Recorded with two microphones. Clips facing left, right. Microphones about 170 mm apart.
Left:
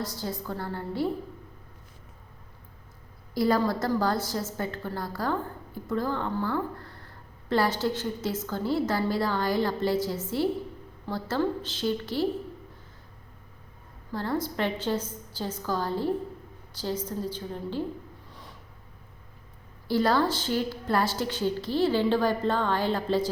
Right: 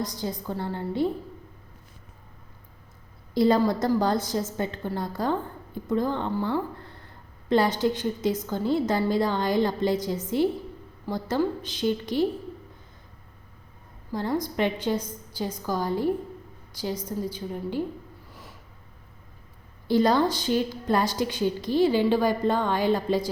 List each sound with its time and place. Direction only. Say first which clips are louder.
0.0 s a woman's voice: right 2 dB; 15° right (ahead or behind)
3.3 s a woman's voice: right 4 dB; 20° right (ahead or behind)
14.1 s a woman's voice: right 2 dB; 15° right (ahead or behind)
18.3 s a sound: right 1 dB; 5° right (ahead or behind)
19.9 s a woman's voice: right 3 dB; 20° right (ahead or behind)